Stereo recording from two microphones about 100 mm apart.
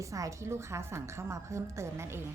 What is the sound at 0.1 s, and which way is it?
A woman's voice, 30° right (ahead or behind).